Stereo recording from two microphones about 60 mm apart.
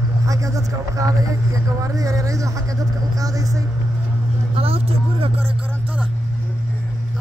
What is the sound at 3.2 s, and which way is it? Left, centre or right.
Speech, right.